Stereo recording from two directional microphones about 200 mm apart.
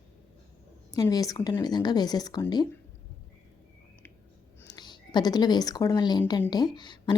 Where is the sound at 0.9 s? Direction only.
20° left (ahead or behind).